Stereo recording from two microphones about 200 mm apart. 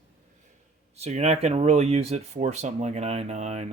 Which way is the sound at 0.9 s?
35° right (ahead or behind).